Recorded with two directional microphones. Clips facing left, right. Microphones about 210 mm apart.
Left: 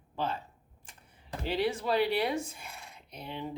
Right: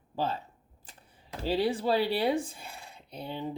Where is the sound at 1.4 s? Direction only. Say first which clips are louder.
Right 3 dB; 35° right (ahead or behind).